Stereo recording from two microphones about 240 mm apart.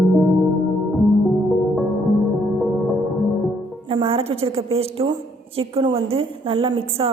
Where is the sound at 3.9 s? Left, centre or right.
Right.